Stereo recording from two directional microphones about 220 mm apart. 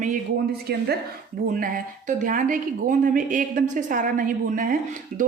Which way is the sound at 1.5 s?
40° right (ahead or behind).